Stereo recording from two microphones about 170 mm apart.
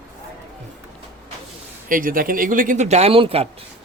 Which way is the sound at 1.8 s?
55° right (ahead or behind).